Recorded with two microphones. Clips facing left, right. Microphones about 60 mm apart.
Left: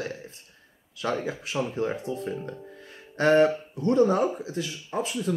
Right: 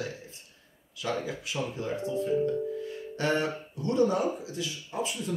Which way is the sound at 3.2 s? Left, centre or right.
Left.